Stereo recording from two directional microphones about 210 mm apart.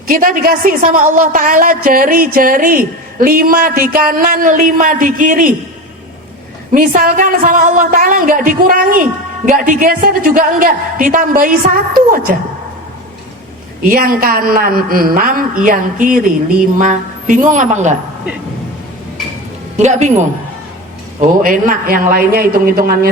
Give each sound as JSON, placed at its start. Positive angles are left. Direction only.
{"t": 0.1, "sound": "a woman's voice", "side_deg": -40}
{"t": 6.7, "sound": "a woman's voice", "side_deg": -40}
{"t": 13.8, "sound": "a woman's voice", "side_deg": -40}
{"t": 19.8, "sound": "a woman's voice", "side_deg": -35}
{"t": 21.2, "sound": "a woman's voice", "side_deg": -40}